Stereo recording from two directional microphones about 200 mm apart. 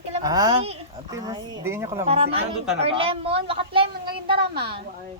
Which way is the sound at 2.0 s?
30° right (ahead or behind).